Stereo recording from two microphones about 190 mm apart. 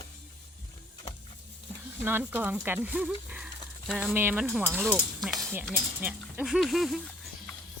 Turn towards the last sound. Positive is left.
turn(degrees=0)  # may be behind; listen again after turning